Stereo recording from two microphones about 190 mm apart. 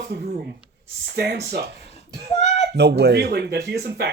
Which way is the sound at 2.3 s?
60° right (ahead or behind).